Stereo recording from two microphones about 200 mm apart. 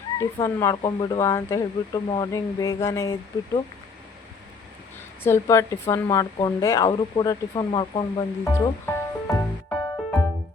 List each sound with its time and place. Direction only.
0.2 s speech: 15° left (ahead or behind)
5.2 s speech: 15° left (ahead or behind)
8.5 s music: 15° left (ahead or behind)